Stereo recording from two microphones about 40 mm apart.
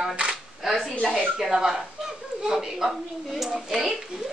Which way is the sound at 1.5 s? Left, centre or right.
Right.